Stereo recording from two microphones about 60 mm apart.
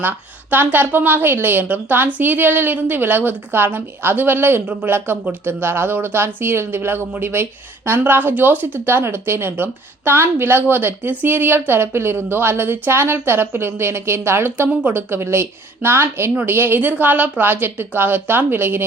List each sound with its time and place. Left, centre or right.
0.5 s speech: right
4.6 s speech: right
4.9 s speech: right
14.7 s speech: right
14.9 s speech: right